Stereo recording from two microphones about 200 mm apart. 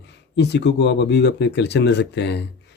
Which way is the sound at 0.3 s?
60° left (ahead or behind).